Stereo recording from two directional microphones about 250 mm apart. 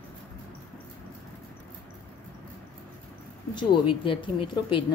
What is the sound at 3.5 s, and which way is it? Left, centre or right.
A woman's voice, centre.